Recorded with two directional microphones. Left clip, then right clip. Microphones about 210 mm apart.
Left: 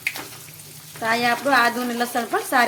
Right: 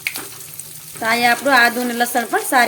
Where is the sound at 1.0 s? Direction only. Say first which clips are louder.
Right 5 dB; 20° right (ahead or behind).